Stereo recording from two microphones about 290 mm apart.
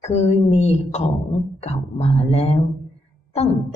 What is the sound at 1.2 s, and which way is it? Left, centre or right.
Speech, centre.